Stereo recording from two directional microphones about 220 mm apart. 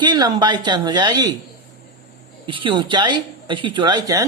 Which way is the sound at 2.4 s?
20° right (ahead or behind).